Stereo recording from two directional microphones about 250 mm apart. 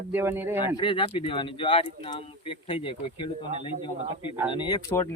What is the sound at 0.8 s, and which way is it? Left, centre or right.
Speech, centre.